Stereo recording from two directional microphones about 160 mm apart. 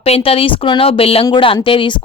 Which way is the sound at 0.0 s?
40° left (ahead or behind).